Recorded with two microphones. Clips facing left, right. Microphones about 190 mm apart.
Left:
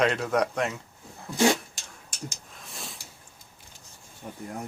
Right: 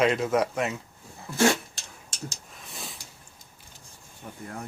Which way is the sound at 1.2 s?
15° left (ahead or behind).